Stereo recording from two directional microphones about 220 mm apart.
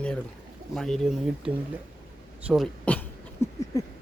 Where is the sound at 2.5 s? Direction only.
5° left (ahead or behind).